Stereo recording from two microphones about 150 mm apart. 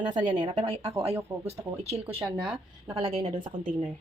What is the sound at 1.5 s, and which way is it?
Speech, 45° right (ahead or behind).